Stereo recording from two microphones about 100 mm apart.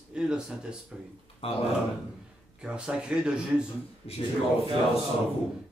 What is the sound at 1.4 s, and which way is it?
Speech, 75° left (ahead or behind).